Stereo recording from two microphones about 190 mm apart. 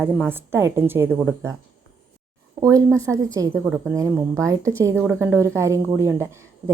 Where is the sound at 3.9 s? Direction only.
15° right (ahead or behind).